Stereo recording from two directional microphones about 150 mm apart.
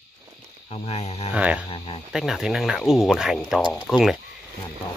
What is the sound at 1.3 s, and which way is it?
Speech, 5° right (ahead or behind).